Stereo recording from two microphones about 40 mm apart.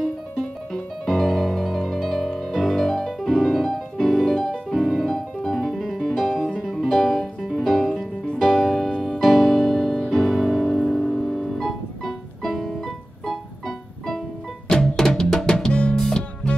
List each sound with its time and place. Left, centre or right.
1.0 s music: centre
15.7 s music: left